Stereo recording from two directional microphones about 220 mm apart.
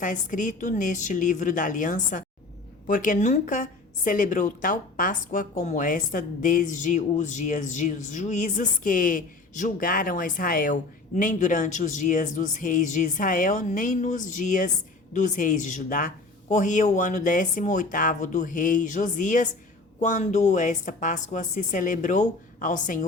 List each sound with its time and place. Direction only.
0.0 s a woman's voice: 35° left (ahead or behind)